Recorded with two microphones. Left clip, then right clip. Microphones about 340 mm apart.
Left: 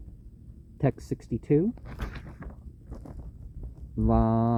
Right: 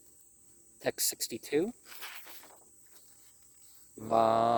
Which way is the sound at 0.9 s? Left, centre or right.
Centre.